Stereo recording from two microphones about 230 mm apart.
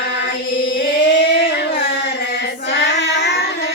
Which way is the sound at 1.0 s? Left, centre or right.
Left.